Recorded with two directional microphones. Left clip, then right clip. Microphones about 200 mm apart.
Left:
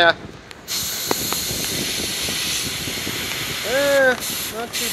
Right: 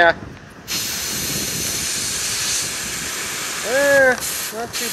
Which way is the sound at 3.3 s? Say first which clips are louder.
Right 2 dB; 5° left (ahead or behind).